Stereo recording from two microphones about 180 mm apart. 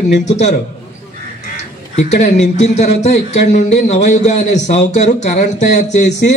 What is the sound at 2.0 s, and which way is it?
A man's voice, 40° left (ahead or behind).